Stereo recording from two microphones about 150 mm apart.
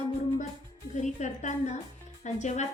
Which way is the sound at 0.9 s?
55° left (ahead or behind).